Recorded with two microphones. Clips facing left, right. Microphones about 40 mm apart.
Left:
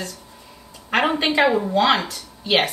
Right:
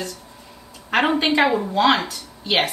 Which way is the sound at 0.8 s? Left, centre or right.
Centre.